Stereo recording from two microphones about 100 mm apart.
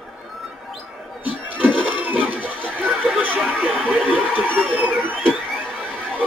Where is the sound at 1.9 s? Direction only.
15° right (ahead or behind).